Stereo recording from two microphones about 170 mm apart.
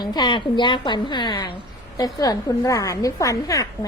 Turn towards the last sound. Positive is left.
turn(degrees=20)  # may be behind; listen again after turning